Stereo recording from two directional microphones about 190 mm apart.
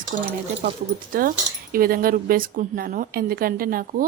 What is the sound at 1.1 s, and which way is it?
Speech, 50° right (ahead or behind).